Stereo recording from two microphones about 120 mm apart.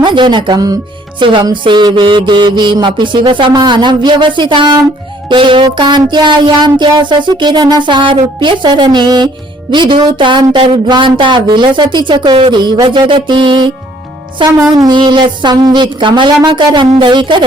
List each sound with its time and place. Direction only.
0.0 s speech: 40° right (ahead or behind)
1.2 s music: 45° right (ahead or behind)
1.6 s speech: 40° right (ahead or behind)
14.8 s speech: 40° right (ahead or behind)